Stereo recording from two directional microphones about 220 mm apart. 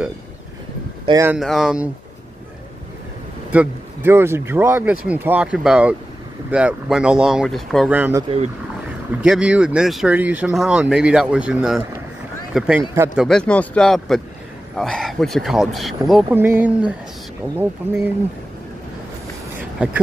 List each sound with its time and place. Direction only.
1.0 s speech: 15° right (ahead or behind)
1.3 s speech: centre (ahead or behind)
3.5 s speech: 10° right (ahead or behind)
19.8 s speech: 5° right (ahead or behind)